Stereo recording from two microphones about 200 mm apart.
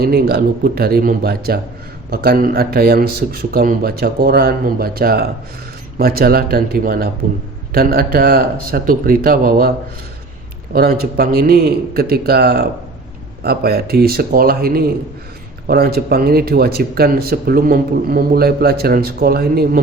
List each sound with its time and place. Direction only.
0.0 s speech: 50° right (ahead or behind)